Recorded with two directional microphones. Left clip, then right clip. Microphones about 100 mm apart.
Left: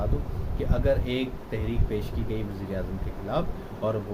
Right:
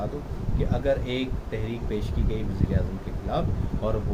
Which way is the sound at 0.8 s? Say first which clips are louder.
Even; 15° left (ahead or behind).